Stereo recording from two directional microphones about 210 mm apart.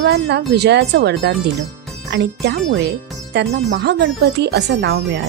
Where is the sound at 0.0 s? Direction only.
55° right (ahead or behind).